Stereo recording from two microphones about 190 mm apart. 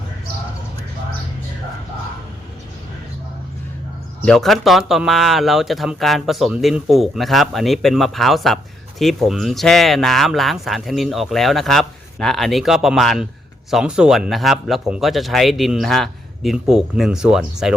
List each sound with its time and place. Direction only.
4.3 s speech: centre (ahead or behind)